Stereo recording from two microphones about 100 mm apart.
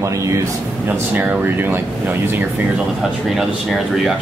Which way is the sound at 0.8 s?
15° right (ahead or behind).